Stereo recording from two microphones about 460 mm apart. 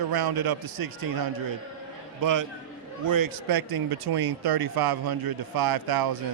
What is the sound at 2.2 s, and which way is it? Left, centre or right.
Speech, right.